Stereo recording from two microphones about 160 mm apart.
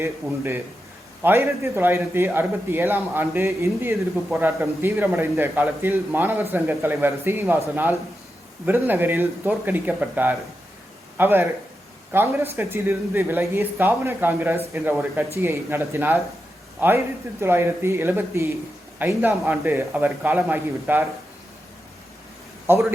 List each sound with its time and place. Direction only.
0.0 s a man's voice: 15° right (ahead or behind)
8.6 s a man's voice: 10° right (ahead or behind)
22.6 s a man's voice: 15° right (ahead or behind)